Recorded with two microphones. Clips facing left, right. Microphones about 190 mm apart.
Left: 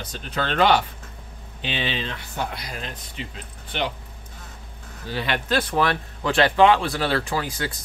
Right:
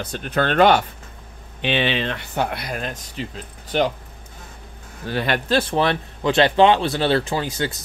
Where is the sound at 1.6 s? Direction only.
65° right (ahead or behind).